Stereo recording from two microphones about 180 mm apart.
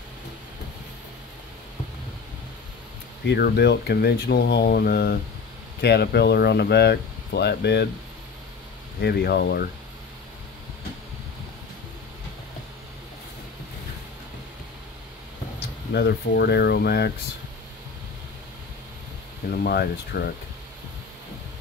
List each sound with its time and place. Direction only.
3.3 s speech: 60° left (ahead or behind)
9.0 s speech: 65° left (ahead or behind)
15.9 s speech: 65° left (ahead or behind)
19.5 s speech: 60° left (ahead or behind)